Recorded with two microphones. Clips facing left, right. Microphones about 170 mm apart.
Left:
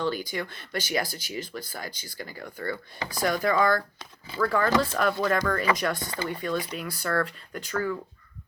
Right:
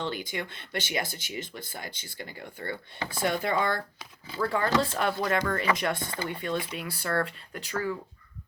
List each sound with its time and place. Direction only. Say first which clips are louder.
0.0 s speech: left 4 dB; 25° right (ahead or behind)